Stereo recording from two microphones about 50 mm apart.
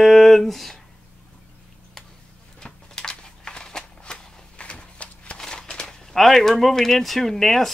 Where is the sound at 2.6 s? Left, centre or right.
Centre.